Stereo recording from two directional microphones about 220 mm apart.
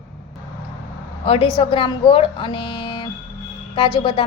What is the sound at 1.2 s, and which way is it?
A woman's voice, 25° left (ahead or behind).